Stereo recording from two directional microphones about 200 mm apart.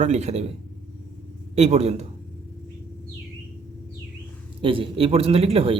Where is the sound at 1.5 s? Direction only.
35° right (ahead or behind).